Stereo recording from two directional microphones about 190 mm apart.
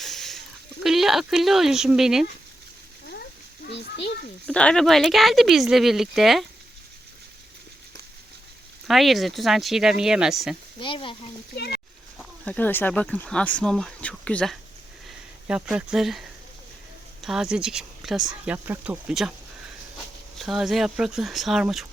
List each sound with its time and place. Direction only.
0.0 s a sound: centre (ahead or behind)
3.1 s a sound: 55° left (ahead or behind)
4.4 s speech: 5° left (ahead or behind)
8.9 s speech: centre (ahead or behind)
10.8 s speech: 25° left (ahead or behind)
11.5 s speech: 60° left (ahead or behind)
12.1 s speech: 10° left (ahead or behind)
20.4 s speech: centre (ahead or behind)